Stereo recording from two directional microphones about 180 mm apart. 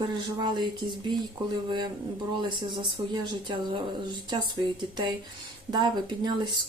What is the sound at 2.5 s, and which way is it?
Speech, 25° right (ahead or behind).